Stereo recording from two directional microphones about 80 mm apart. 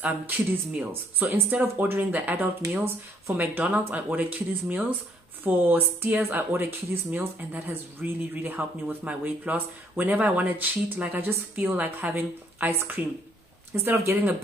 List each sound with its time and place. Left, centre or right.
0.0 s speech: centre
13.8 s speech: right